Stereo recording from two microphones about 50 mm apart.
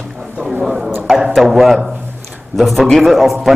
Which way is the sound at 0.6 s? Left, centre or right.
Centre.